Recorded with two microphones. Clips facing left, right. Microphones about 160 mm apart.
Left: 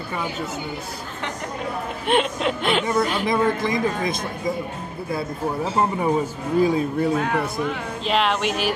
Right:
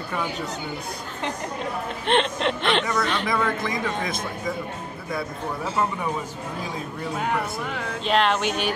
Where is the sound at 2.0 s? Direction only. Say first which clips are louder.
Left 1 dB; 5° left (ahead or behind).